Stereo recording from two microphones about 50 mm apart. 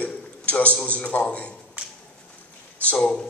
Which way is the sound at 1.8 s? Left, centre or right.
Right.